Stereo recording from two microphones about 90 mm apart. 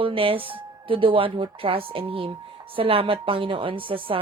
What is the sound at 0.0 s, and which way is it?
A woman's voice, 85° right.